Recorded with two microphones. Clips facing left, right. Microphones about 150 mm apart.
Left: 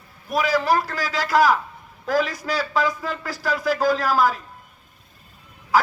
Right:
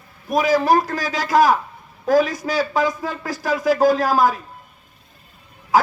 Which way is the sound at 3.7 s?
50° right (ahead or behind).